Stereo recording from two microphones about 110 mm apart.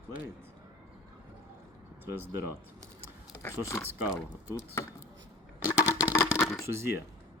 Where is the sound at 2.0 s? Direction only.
20° right (ahead or behind).